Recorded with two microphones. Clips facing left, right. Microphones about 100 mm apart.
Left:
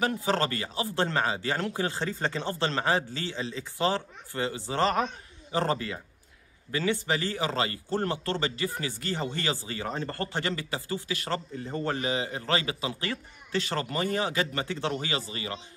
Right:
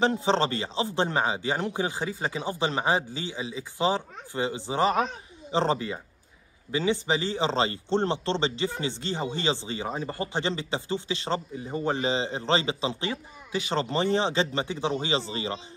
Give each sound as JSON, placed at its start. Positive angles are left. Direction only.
{"t": 0.0, "sound": "speech", "side_deg": -25}